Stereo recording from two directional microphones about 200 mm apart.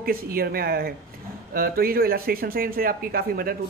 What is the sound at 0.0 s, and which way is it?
Speech, 45° right (ahead or behind).